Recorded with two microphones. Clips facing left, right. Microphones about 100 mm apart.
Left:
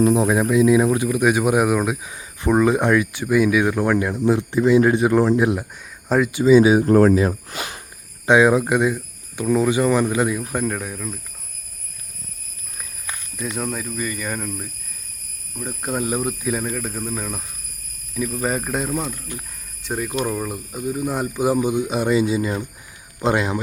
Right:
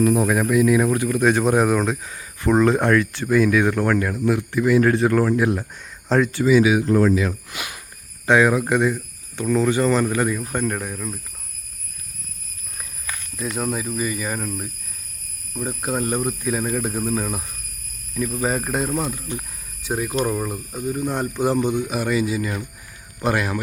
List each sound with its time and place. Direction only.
0.0 s speech: 20° left (ahead or behind)
6.1 s speech: 5° left (ahead or behind)
6.4 s speech: 30° left (ahead or behind)
6.8 s speech: 50° left (ahead or behind)
7.2 s speech: 35° left (ahead or behind)
8.3 s speech: 20° left (ahead or behind); by 11.2 s centre (ahead or behind)
13.3 s speech: centre (ahead or behind)
15.9 s speech: 5° left (ahead or behind)
16.7 s speech: 15° right (ahead or behind); by 23.6 s 20° left (ahead or behind)